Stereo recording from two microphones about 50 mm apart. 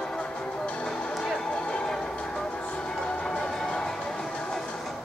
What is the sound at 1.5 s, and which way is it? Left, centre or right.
Music, centre.